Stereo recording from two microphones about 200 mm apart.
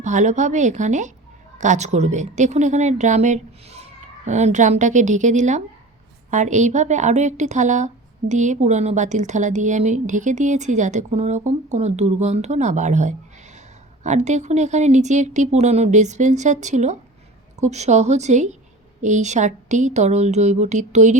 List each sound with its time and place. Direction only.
0.0 s a woman's voice: 35° right (ahead or behind)